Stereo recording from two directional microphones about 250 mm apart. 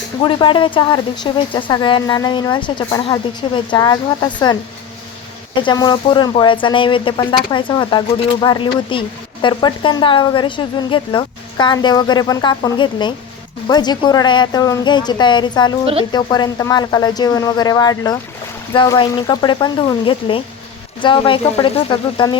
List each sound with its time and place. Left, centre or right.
0.2 s a woman's voice: centre
5.6 s a woman's voice: centre